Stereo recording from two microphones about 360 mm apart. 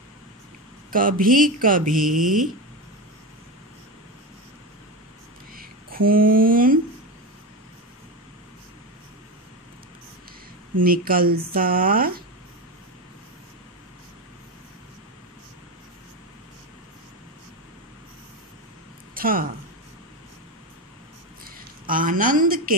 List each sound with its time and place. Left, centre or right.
0.9 s speech: right
5.6 s speech: right
10.8 s speech: right
19.1 s a sound: right
21.5 s a woman's voice: right